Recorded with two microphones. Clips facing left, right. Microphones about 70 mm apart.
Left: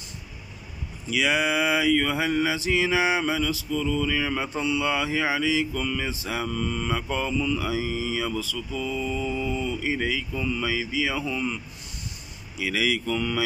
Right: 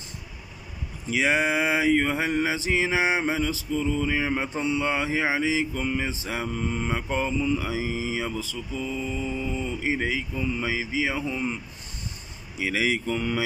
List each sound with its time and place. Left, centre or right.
1.0 s mantra: right